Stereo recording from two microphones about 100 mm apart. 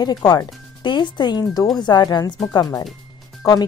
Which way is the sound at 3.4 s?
40° left (ahead or behind).